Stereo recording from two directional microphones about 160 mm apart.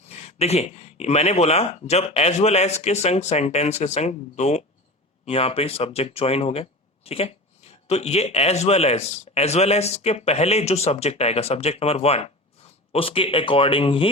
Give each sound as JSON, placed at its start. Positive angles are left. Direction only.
{"t": 0.1, "sound": "speech", "side_deg": 40}